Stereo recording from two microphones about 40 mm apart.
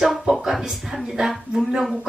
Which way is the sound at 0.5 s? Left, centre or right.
Centre.